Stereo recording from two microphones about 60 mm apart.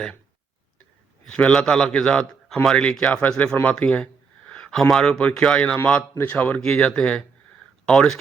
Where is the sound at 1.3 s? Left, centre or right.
Centre.